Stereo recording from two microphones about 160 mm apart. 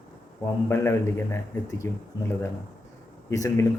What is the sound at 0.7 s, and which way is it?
Speech, 15° left (ahead or behind).